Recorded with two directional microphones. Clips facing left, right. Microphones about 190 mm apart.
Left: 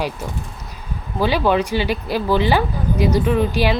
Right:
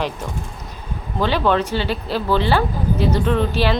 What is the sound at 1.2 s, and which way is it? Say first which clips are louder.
Speech: left 1 dB; 10° left (ahead or behind).